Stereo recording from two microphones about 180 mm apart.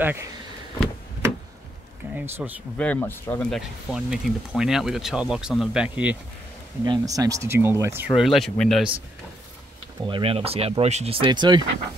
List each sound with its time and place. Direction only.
0.0 s speech: 10° right (ahead or behind)
2.1 s speech: 10° right (ahead or behind)
2.8 s speech: 10° left (ahead or behind); by 6.1 s 5° right (ahead or behind)
6.8 s speech: 20° right (ahead or behind)
8.1 s speech: centre (ahead or behind)
10.0 s speech: 30° right (ahead or behind)